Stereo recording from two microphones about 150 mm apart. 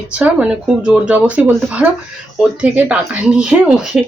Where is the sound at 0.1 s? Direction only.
10° right (ahead or behind).